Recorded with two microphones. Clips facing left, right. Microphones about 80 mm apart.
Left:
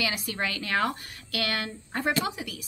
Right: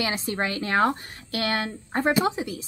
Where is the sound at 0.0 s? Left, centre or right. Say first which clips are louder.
Right 4 dB; right.